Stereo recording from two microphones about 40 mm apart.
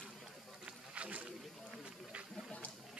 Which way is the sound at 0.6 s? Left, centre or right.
Right.